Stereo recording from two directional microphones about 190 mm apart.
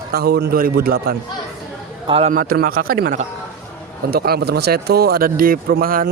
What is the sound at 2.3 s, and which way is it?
A man's voice, 50° right (ahead or behind).